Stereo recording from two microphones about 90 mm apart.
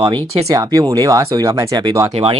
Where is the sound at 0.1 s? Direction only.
45° right (ahead or behind).